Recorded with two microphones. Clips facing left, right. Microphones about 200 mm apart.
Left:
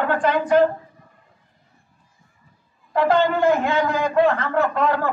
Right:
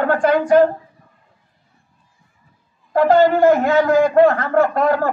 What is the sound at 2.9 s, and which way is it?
A man's voice, 40° right (ahead or behind).